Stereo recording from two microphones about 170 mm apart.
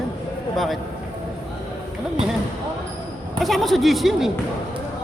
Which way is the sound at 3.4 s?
Centre (ahead or behind).